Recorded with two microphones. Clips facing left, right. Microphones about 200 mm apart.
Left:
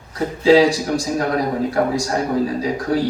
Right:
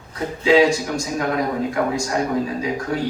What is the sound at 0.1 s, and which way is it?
A man's voice, 35° left (ahead or behind).